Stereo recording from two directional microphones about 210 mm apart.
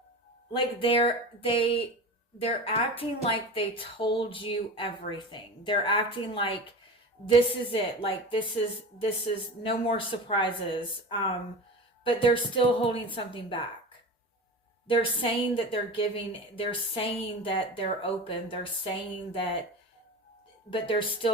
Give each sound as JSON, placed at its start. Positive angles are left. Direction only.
{"t": 0.5, "sound": "a woman's voice", "side_deg": 25}
{"t": 14.8, "sound": "a woman's voice", "side_deg": 25}
{"t": 20.7, "sound": "a woman's voice", "side_deg": 25}